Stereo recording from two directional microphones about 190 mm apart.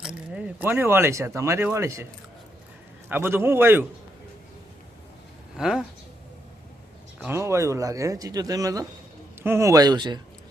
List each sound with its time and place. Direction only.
0.0 s speech: 5° right (ahead or behind)
3.1 s speech: 10° right (ahead or behind)
5.5 s speech: centre (ahead or behind)
7.2 s speech: 15° right (ahead or behind)